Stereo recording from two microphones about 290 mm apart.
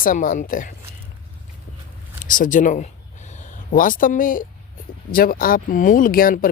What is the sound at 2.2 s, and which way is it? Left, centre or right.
Speech, left.